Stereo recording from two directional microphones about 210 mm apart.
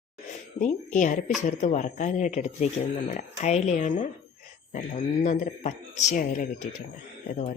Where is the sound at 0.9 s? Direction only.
35° left (ahead or behind).